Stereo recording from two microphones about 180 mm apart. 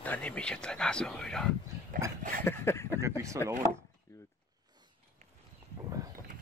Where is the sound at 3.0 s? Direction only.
15° right (ahead or behind).